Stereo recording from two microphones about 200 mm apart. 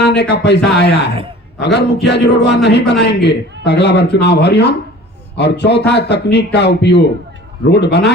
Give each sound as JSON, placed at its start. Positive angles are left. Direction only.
{"t": 0.0, "sound": "a man's voice", "side_deg": 55}